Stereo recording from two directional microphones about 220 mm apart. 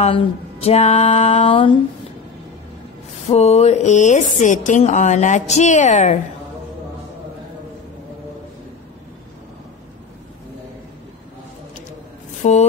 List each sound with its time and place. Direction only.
0.0 s a sound: 30° left (ahead or behind)
3.3 s speech: 30° left (ahead or behind)
12.4 s speech: 30° left (ahead or behind)